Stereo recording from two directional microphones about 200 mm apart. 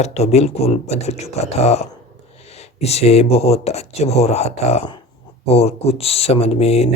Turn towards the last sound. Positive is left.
turn(degrees=30)  # may be behind; listen again after turning